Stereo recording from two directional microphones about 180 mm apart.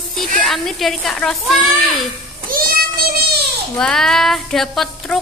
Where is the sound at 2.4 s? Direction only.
55° right (ahead or behind).